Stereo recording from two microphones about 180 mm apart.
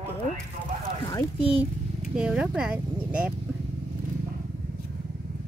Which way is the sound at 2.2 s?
5° right (ahead or behind).